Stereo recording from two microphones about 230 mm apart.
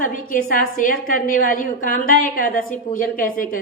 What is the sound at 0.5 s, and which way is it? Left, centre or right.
A woman's voice, left.